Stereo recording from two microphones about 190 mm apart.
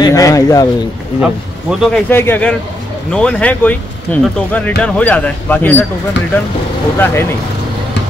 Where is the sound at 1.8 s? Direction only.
10° left (ahead or behind).